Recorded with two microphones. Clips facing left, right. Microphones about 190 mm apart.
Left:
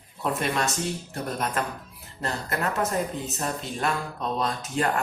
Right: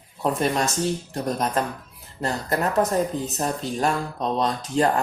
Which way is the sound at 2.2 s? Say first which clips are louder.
Right 4 dB; 35° right (ahead or behind).